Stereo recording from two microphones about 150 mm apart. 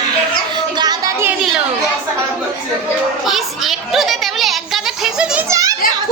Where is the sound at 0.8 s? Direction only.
25° right (ahead or behind).